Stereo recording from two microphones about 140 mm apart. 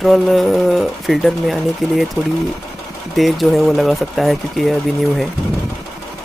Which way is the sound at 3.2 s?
Centre (ahead or behind).